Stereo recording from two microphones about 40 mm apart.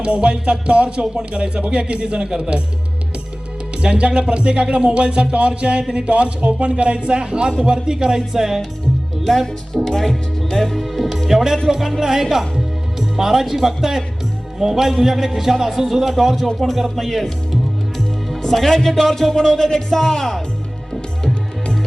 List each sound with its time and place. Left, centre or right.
0.0 s a man's voice: right
3.8 s a man's voice: right; by 8.6 s centre
9.2 s speech: centre